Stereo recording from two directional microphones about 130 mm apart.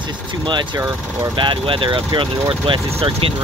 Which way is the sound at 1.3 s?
40° right (ahead or behind).